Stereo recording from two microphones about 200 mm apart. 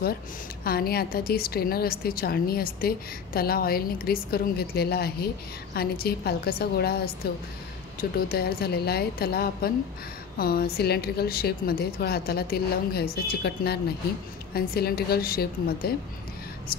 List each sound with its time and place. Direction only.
0.7 s a woman's voice: 50° left (ahead or behind)